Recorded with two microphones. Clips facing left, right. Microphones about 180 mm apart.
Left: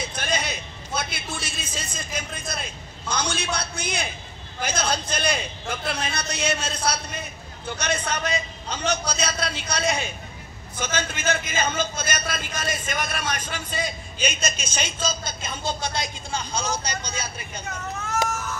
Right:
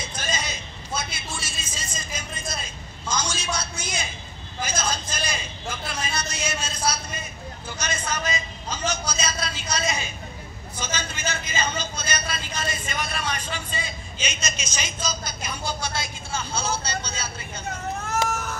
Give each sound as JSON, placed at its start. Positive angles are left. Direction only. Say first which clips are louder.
{"t": 0.1, "sound": "a sound", "louder": "left 3 dB", "side_deg": 60}
{"t": 4.6, "sound": "a man's voice", "louder": "left 2 dB", "side_deg": 60}
{"t": 14.9, "sound": "speech", "louder": "left 2 dB", "side_deg": 25}